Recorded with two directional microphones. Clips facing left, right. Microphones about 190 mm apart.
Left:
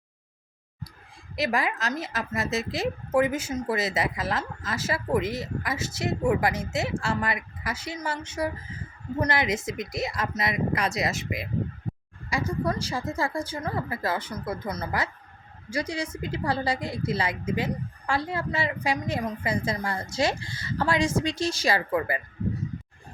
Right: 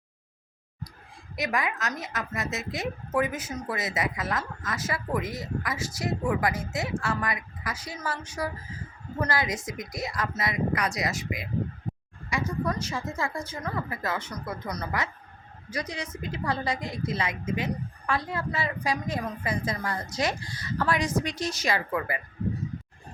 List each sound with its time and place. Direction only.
1.4 s a woman's voice: 30° left (ahead or behind)